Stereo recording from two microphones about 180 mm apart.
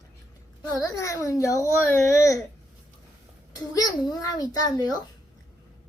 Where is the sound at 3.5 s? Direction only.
20° left (ahead or behind).